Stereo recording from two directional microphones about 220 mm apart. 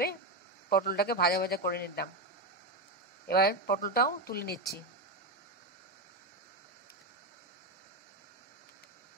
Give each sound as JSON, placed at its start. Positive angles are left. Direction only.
{"t": 0.7, "sound": "speech", "side_deg": 45}
{"t": 3.3, "sound": "speech", "side_deg": 45}